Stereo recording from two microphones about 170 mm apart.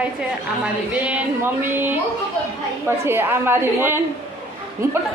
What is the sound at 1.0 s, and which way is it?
A woman's voice, 10° right (ahead or behind).